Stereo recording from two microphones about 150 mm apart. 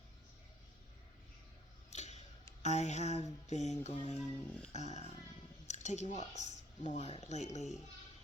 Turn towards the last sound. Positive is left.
turn(degrees=50)  # may be behind; listen again after turning